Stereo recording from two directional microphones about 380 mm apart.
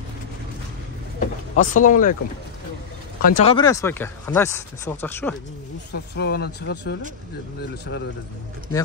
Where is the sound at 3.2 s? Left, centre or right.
Centre.